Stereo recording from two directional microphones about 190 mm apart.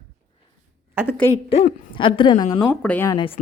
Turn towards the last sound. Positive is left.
turn(degrees=10)  # may be behind; listen again after turning